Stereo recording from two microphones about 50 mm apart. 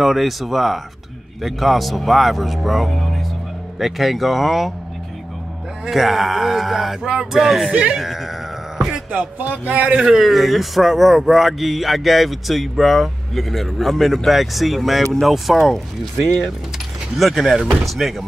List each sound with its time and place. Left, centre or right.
0.0 s a man's voice: centre
5.9 s a man's voice: centre
7.7 s speech: right
8.0 s a sound: centre
9.7 s speech: right
9.9 s a man's voice: centre
17.2 s a man's voice: centre